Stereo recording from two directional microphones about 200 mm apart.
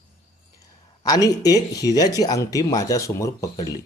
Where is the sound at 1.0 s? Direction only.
20° left (ahead or behind).